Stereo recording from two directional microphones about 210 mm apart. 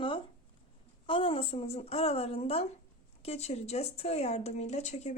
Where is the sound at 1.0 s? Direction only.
25° left (ahead or behind).